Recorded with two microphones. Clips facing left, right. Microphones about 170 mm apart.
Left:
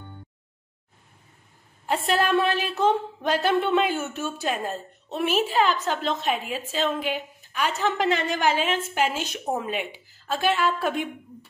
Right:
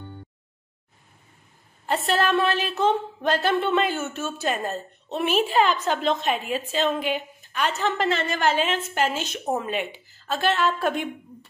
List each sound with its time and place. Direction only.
1.9 s a woman's voice: 10° left (ahead or behind)